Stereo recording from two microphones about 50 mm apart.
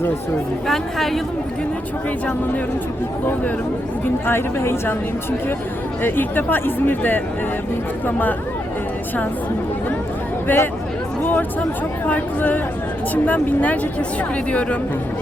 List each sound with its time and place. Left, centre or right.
0.7 s speech: centre
4.3 s speech: left
6.0 s speech: left
10.5 s speech: left